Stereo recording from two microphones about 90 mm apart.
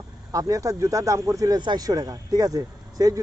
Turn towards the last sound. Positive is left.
turn(degrees=-40)  # may be behind; listen again after turning